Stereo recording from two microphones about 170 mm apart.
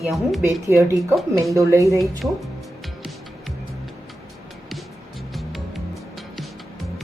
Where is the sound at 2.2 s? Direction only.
Centre (ahead or behind).